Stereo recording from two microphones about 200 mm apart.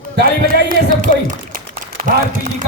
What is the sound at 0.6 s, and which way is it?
A man's voice, 40° right (ahead or behind).